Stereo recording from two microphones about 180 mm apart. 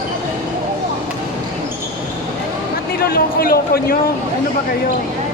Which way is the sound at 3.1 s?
55° left (ahead or behind).